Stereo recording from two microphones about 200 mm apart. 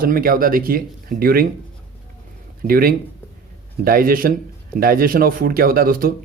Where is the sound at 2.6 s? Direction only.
45° right (ahead or behind).